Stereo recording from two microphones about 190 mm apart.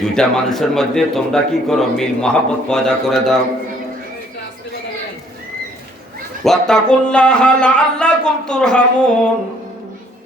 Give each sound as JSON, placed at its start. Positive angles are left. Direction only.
{"t": 0.0, "sound": "a man's voice", "side_deg": 0}
{"t": 6.4, "sound": "a man's voice", "side_deg": 5}